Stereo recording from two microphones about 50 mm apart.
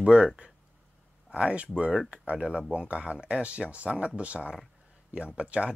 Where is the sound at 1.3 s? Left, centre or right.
Right.